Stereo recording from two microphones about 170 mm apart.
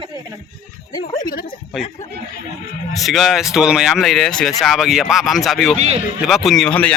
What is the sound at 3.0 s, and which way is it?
Speech, centre (ahead or behind).